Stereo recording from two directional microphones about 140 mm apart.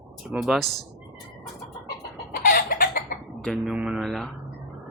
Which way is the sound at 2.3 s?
90° left.